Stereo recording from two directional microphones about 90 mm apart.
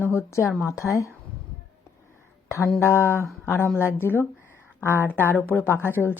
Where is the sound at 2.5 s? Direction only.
30° left (ahead or behind).